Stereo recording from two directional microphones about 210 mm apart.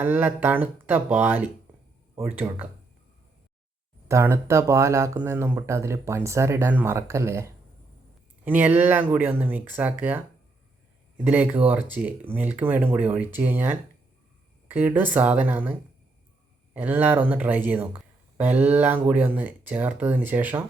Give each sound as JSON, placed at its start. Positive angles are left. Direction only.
{"t": 0.0, "sound": "speech", "side_deg": -10}
{"t": 1.7, "sound": "a sound", "side_deg": -5}
{"t": 2.1, "sound": "speech", "side_deg": -10}
{"t": 4.1, "sound": "speech", "side_deg": -10}
{"t": 11.2, "sound": "speech", "side_deg": -10}